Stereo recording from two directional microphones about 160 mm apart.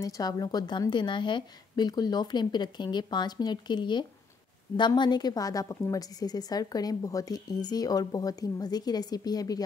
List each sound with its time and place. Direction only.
0.0 s a woman's voice: 25° left (ahead or behind)